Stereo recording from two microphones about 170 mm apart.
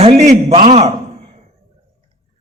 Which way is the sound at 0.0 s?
40° right (ahead or behind).